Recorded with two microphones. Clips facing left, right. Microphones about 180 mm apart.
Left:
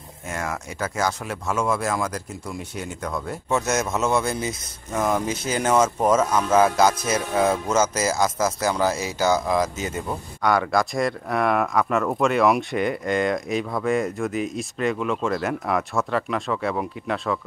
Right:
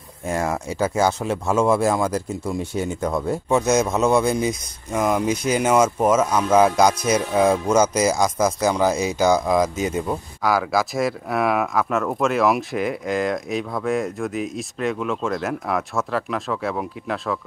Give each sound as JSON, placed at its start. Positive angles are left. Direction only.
{"t": 0.3, "sound": "speech", "side_deg": -30}
{"t": 3.4, "sound": "speech", "side_deg": -15}
{"t": 10.4, "sound": "speech", "side_deg": 0}